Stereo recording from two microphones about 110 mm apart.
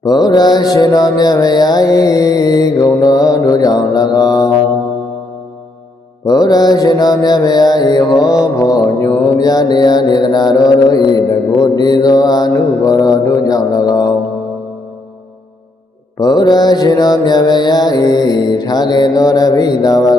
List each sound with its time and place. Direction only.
0.0 s mantra: 40° left (ahead or behind)
6.2 s mantra: 35° left (ahead or behind)
16.2 s mantra: 40° left (ahead or behind)